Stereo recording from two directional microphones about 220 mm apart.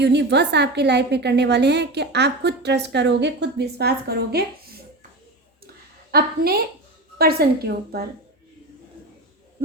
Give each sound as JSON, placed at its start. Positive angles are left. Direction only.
{"t": 0.0, "sound": "a woman's voice", "side_deg": -50}
{"t": 6.1, "sound": "a woman's voice", "side_deg": -45}